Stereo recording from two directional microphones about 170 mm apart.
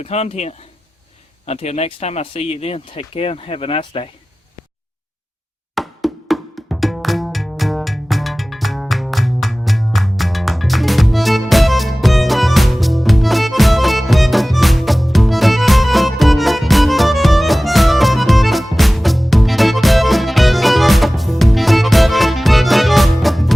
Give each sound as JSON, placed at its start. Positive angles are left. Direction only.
{"t": 0.0, "sound": "speech", "side_deg": 40}
{"t": 5.7, "sound": "music", "side_deg": 0}